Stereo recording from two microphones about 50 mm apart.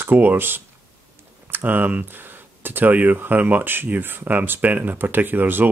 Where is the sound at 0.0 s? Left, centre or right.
Right.